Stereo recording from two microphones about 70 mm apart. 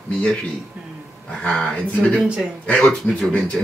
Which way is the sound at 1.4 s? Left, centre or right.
Centre.